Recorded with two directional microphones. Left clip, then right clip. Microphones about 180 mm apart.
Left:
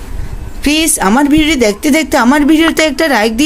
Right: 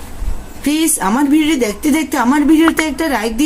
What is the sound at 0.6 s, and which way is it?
A woman's voice, 50° left (ahead or behind).